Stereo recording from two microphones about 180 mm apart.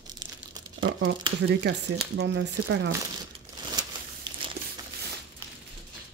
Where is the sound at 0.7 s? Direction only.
90° right.